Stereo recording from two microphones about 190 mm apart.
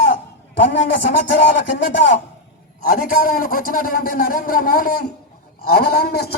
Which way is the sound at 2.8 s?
50° left (ahead or behind).